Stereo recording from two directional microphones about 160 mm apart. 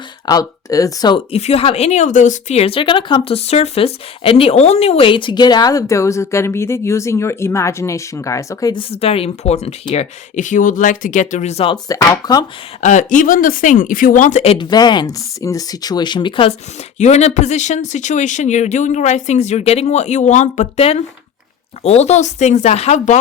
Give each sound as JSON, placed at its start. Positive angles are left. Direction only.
{"t": 0.3, "sound": "speech", "side_deg": 20}
{"t": 1.3, "sound": "speech", "side_deg": 40}
{"t": 8.7, "sound": "speech", "side_deg": 35}
{"t": 11.9, "sound": "speech", "side_deg": 20}
{"t": 12.8, "sound": "speech", "side_deg": 50}
{"t": 14.7, "sound": "speech", "side_deg": 25}
{"t": 17.0, "sound": "speech", "side_deg": 45}